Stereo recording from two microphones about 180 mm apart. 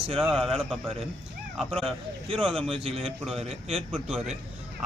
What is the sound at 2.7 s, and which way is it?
Speech, 30° right (ahead or behind).